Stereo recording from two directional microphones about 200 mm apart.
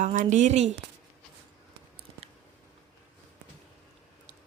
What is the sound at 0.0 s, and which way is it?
Speech, 40° right (ahead or behind).